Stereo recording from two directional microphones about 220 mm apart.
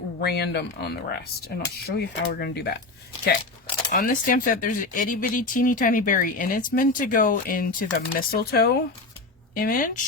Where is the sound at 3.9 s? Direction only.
40° left (ahead or behind).